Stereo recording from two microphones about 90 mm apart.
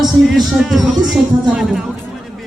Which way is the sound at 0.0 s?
Centre (ahead or behind).